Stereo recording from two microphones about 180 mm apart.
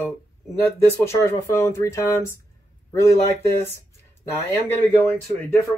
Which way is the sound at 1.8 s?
15° left (ahead or behind).